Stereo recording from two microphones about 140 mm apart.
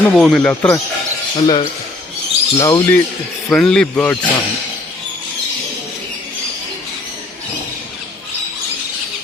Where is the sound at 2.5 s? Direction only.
25° left (ahead or behind).